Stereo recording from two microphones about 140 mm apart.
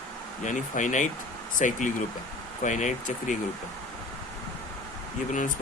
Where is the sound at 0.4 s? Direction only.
60° left (ahead or behind).